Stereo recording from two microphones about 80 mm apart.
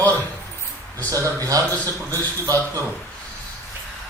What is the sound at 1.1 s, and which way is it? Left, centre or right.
Speech, right.